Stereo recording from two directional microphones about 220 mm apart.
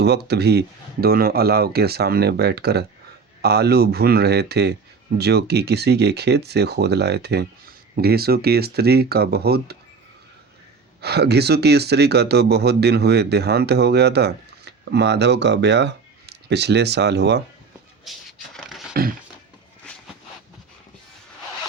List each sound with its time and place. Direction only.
0.0 s speech: 50° right (ahead or behind)
11.0 s speech: 50° right (ahead or behind)
18.0 s a sound: centre (ahead or behind)